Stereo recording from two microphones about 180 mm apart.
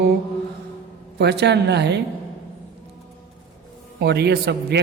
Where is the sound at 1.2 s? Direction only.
70° right (ahead or behind).